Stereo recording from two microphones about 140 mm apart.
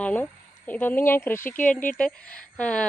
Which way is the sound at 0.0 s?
10° left (ahead or behind).